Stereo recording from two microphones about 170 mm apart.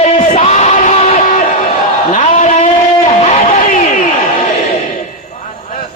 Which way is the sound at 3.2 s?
45° left (ahead or behind).